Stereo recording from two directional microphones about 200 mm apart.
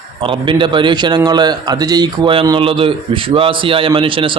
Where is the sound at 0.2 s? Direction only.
25° right (ahead or behind).